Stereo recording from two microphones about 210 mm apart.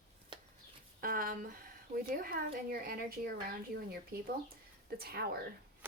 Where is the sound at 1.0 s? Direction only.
40° right (ahead or behind).